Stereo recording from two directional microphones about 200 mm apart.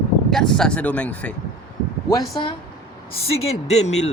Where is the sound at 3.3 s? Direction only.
30° left (ahead or behind).